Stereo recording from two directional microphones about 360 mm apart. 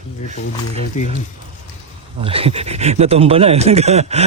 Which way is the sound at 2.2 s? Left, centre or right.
Centre.